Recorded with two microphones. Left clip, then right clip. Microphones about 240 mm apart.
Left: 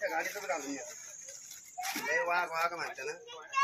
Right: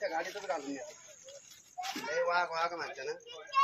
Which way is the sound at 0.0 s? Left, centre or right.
Centre.